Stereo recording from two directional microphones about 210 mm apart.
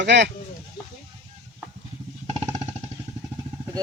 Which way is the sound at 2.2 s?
30° right (ahead or behind).